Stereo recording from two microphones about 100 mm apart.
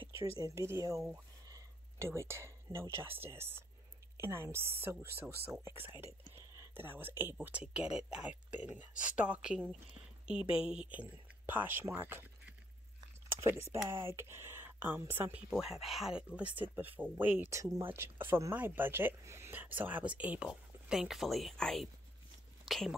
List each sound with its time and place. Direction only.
0.4 s speech: 30° right (ahead or behind)
7.4 s speech: 10° right (ahead or behind)
11.0 s speech: 20° right (ahead or behind)
13.4 s speech: 25° right (ahead or behind)
15.5 s speech: 5° right (ahead or behind)
17.5 s speech: 30° right (ahead or behind); by 22.9 s centre (ahead or behind)